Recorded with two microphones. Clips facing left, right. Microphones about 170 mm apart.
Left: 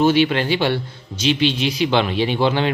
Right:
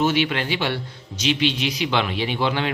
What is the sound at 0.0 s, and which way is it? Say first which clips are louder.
A man's voice: left 5 dB; 30° left (ahead or behind).